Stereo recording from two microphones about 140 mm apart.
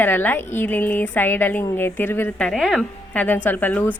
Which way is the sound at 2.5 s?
Centre (ahead or behind).